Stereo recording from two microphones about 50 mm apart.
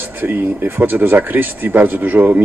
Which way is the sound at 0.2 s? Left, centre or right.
Right.